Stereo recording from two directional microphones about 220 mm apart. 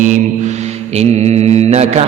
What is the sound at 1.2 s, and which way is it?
Mantra, 30° right (ahead or behind).